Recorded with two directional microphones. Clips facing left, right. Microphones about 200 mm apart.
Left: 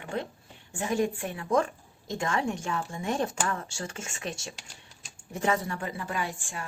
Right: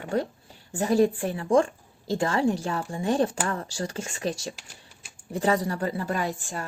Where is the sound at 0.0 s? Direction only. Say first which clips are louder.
Right 6 dB; 40° right (ahead or behind).